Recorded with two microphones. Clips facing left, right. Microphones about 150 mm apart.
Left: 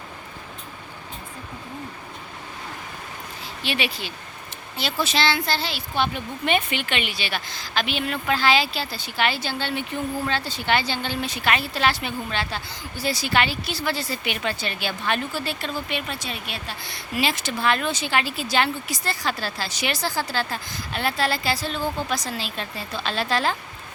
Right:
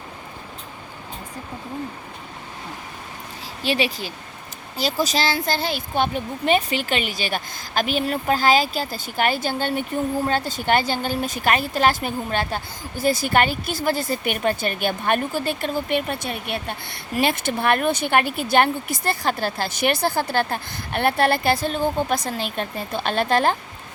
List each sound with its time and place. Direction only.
3.6 s a woman's voice: 40° right (ahead or behind)